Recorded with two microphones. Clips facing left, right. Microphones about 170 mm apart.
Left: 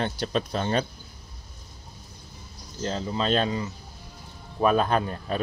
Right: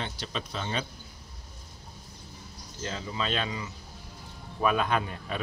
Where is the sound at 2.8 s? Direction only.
35° left (ahead or behind).